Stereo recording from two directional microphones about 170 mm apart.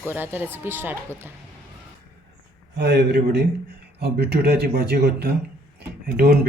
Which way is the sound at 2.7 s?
80° right.